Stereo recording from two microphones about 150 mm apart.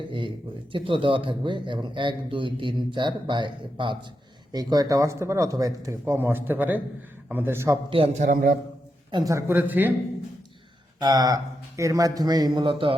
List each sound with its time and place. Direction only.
0.7 s a man's voice: 35° right (ahead or behind); by 7.8 s 15° right (ahead or behind)
7.9 s a man's voice: 40° right (ahead or behind)
8.2 s a man's voice: 70° right (ahead or behind)
9.1 s speech: 20° right (ahead or behind)
11.0 s speech: 25° right (ahead or behind)